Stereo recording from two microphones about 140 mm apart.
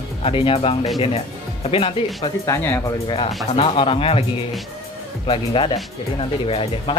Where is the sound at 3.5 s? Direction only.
40° left (ahead or behind).